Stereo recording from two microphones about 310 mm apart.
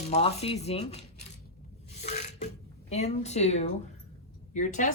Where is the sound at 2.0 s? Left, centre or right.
Left.